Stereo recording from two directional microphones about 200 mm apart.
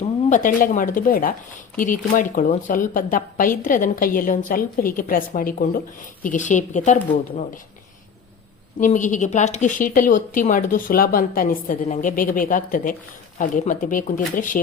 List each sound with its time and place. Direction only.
0.0 s a woman's voice: 40° left (ahead or behind)
8.8 s a woman's voice: 40° left (ahead or behind)